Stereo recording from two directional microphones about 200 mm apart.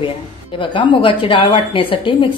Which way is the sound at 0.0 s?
25° left (ahead or behind).